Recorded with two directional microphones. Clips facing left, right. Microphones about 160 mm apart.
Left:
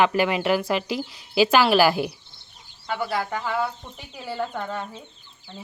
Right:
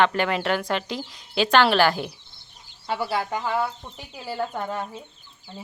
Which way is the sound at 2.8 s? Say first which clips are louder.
Even; 30° right (ahead or behind).